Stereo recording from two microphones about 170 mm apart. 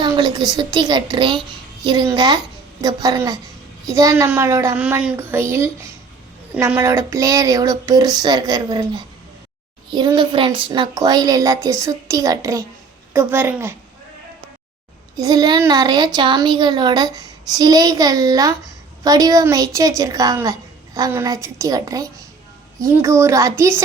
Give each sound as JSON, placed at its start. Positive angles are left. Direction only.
{"t": 0.0, "sound": "a child's voice", "side_deg": -25}
{"t": 15.1, "sound": "a child's voice", "side_deg": -25}